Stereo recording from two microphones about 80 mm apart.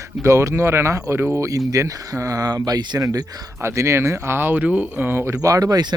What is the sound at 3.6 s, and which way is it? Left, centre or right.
Speech, right.